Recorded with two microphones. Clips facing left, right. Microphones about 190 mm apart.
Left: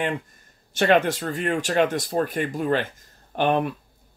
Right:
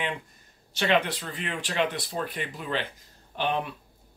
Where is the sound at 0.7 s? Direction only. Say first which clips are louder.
Left 6 dB; 45° left (ahead or behind).